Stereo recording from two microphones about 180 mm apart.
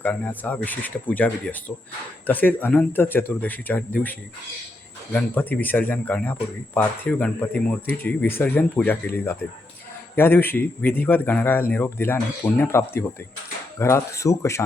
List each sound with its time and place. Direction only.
0.0 s a man's voice: 10° left (ahead or behind)
5.1 s a man's voice: 10° left (ahead or behind)